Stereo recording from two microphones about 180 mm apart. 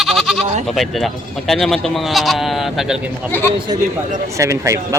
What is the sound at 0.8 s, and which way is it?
Speech, centre (ahead or behind).